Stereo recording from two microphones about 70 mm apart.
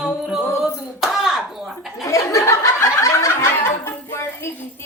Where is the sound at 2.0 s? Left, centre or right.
Left.